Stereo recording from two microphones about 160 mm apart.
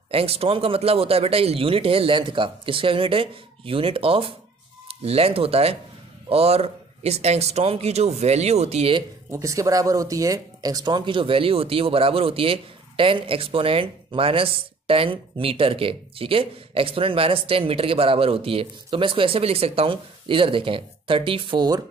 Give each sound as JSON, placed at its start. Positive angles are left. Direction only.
{"t": 0.1, "sound": "speech", "side_deg": -35}
{"t": 9.3, "sound": "speech", "side_deg": -20}